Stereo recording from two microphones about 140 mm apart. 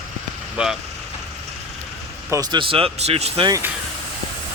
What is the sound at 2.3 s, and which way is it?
Speech, 25° right (ahead or behind).